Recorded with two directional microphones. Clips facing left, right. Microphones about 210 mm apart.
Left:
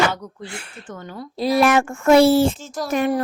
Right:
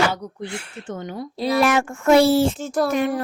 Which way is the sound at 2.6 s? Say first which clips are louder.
Right 7 dB; 60° right (ahead or behind).